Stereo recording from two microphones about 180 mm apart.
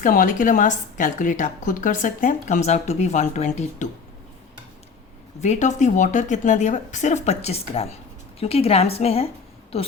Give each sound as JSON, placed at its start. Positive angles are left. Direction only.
{"t": 0.0, "sound": "a woman's voice", "side_deg": 50}
{"t": 5.4, "sound": "a woman's voice", "side_deg": 40}